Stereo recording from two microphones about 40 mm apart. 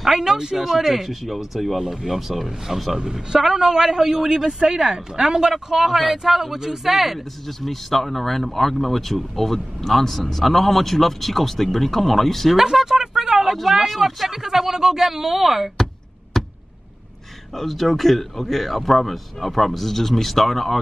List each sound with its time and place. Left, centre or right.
0.0 s speech: centre
0.6 s speech: centre
3.0 s a man's voice: centre
7.4 s speech: centre
12.5 s a sound: centre
13.5 s a man's voice: centre
16.3 s a sound: centre
17.6 s speech: centre